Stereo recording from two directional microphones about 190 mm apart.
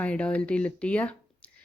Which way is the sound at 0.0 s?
5° left (ahead or behind).